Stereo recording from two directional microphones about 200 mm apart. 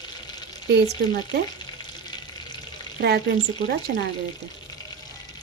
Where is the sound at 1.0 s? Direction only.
55° right (ahead or behind).